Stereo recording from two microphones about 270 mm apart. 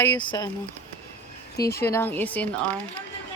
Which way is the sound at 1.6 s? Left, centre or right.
Centre.